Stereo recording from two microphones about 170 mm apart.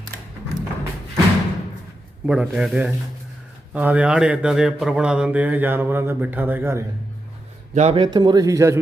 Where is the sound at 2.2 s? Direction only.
5° right (ahead or behind).